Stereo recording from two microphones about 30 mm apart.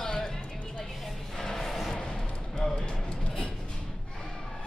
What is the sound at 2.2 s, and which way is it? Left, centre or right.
Music, left.